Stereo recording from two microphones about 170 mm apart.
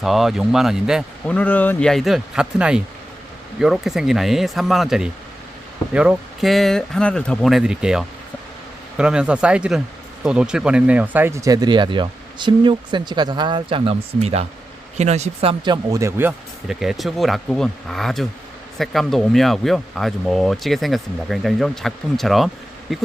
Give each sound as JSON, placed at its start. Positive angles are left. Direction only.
{"t": 0.0, "sound": "speech", "side_deg": 0}
{"t": 1.3, "sound": "speech", "side_deg": 10}
{"t": 16.6, "sound": "speech", "side_deg": 0}